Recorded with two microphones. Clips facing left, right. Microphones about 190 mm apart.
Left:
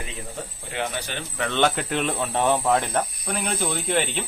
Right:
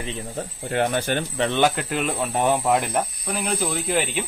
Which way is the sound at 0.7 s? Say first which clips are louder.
Right 8 dB; 50° right (ahead or behind).